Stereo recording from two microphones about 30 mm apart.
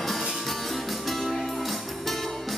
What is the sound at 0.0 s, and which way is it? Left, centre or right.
Music, centre.